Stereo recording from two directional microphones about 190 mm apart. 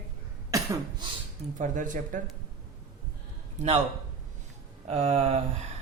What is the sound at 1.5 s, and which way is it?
Speech, 40° right (ahead or behind).